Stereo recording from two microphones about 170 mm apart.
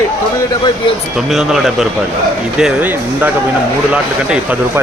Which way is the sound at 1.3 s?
Centre (ahead or behind).